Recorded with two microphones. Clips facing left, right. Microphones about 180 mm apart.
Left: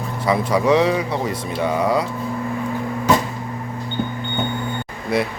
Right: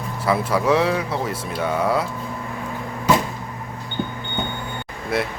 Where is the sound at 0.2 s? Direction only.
Centre (ahead or behind).